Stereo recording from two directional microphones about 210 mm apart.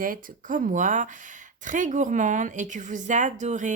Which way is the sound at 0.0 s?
40° right (ahead or behind).